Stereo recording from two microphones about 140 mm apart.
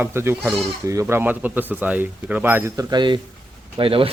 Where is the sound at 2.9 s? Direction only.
35° right (ahead or behind).